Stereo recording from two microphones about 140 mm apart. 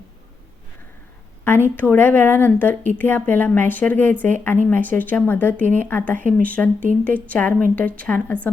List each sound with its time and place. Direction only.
1.5 s speech: 15° left (ahead or behind)